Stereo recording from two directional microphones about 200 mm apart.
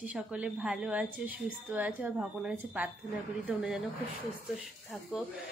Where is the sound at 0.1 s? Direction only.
5° right (ahead or behind).